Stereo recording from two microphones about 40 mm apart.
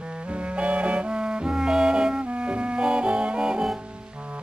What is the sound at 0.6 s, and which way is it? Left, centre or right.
Music, right.